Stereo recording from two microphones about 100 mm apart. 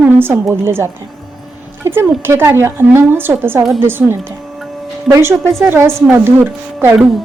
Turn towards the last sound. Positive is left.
turn(degrees=-20)  # may be behind; listen again after turning